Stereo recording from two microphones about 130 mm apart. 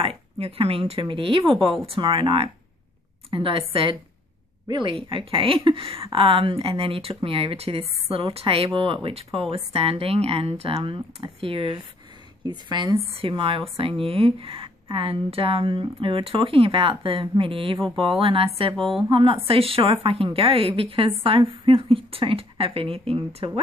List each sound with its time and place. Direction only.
0.0 s a woman's voice: 45° right (ahead or behind)